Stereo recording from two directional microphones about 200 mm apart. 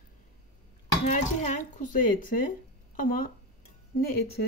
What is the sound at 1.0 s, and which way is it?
Speech, 35° left (ahead or behind).